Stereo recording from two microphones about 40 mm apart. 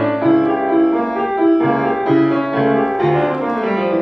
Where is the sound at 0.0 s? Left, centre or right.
Centre.